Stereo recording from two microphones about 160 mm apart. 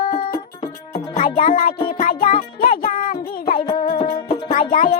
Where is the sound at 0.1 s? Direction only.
70° left (ahead or behind).